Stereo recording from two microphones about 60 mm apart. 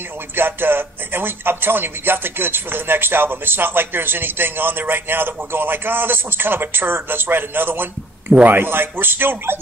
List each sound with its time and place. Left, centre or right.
0.4 s a man's voice: right
8.3 s speech: right
8.5 s a man's voice: right